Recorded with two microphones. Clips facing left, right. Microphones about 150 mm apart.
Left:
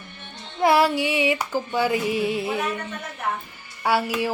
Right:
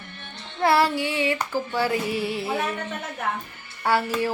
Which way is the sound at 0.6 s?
15° left (ahead or behind).